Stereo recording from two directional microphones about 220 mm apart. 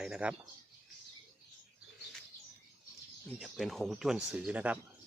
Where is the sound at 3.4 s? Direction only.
Centre (ahead or behind).